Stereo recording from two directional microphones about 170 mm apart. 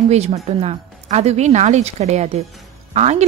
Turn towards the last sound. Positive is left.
turn(degrees=-40)  # may be behind; listen again after turning